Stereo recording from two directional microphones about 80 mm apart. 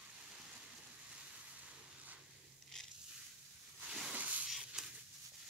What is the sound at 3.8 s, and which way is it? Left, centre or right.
Hiss, centre.